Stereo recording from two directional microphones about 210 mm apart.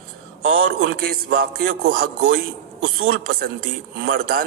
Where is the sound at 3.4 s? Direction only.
50° right (ahead or behind).